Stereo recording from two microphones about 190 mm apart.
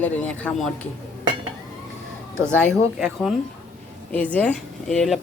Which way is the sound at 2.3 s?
15° right (ahead or behind).